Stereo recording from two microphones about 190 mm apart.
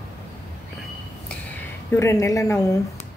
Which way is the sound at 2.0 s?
15° left (ahead or behind).